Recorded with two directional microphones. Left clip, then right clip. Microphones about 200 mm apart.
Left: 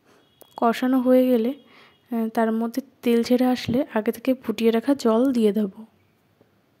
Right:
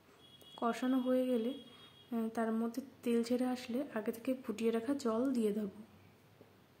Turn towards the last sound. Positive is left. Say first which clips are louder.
# left 15 dB
turn(degrees=40)  # may be behind; listen again after turning